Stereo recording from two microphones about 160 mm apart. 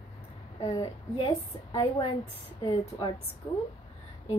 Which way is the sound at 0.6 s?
30° left (ahead or behind).